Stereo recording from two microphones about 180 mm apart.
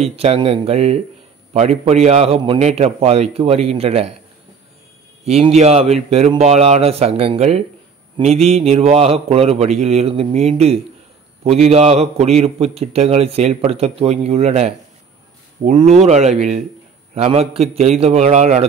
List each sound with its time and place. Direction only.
0.0 s a man's voice: 35° right (ahead or behind)
5.2 s a man's voice: 35° right (ahead or behind)